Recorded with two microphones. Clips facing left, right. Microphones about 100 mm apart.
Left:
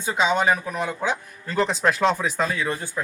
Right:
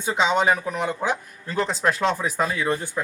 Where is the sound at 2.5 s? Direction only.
15° right (ahead or behind).